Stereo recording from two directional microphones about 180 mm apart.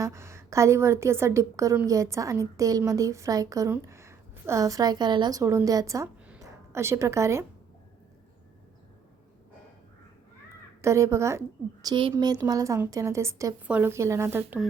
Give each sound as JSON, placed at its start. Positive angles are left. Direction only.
{"t": 0.0, "sound": "a woman's voice", "side_deg": -15}
{"t": 10.8, "sound": "a woman's voice", "side_deg": -15}